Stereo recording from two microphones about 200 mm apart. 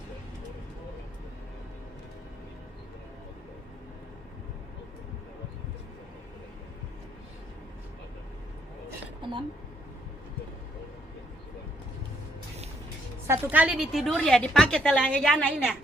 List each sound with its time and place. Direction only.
9.2 s a woman's voice: 25° right (ahead or behind)
13.2 s a woman's voice: 10° right (ahead or behind); by 15.6 s 5° left (ahead or behind)